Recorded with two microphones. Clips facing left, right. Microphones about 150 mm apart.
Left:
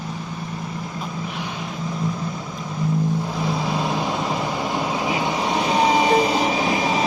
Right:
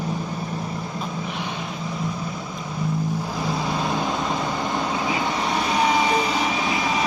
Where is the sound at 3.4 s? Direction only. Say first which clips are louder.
Even; centre (ahead or behind).